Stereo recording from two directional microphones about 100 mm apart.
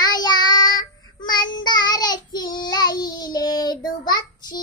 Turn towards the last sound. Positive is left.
turn(degrees=40)  # may be behind; listen again after turning